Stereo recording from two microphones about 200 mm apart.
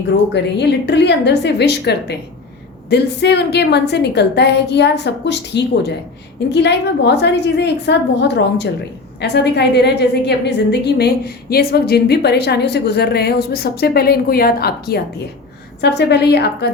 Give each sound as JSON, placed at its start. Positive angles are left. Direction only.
{"t": 0.3, "sound": "a woman's voice", "side_deg": 60}